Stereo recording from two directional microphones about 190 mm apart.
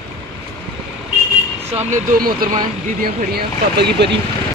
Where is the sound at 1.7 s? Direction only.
40° right (ahead or behind); by 4.1 s 60° right (ahead or behind).